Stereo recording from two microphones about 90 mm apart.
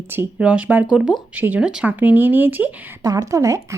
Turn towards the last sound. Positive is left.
turn(degrees=-35)  # may be behind; listen again after turning